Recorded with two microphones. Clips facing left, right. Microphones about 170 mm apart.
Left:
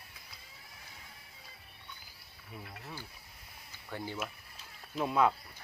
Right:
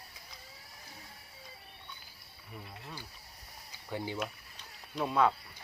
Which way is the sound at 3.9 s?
15° right (ahead or behind).